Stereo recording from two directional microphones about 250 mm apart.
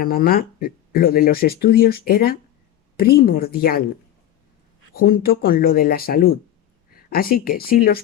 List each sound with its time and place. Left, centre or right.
0.0 s speech: left
4.9 s speech: left